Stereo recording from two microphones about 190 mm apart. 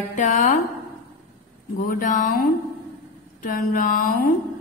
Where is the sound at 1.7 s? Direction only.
45° left (ahead or behind).